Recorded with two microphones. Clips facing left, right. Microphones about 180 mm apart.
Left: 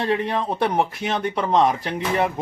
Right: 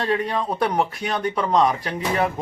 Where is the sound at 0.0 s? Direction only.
25° left (ahead or behind).